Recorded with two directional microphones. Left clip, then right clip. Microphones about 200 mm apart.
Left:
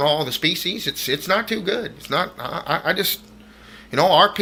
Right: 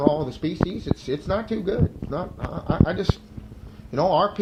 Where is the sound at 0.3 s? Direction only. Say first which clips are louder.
Left 6 dB; 5° right (ahead or behind).